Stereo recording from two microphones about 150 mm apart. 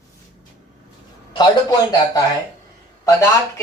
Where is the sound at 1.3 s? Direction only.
25° left (ahead or behind).